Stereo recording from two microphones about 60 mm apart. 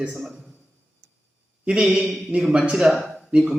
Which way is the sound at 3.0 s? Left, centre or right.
Centre.